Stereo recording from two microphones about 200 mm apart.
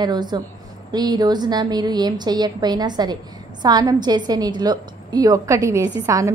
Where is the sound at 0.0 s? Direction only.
20° right (ahead or behind).